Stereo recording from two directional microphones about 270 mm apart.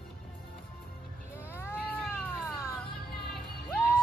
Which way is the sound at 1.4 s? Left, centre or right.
Centre.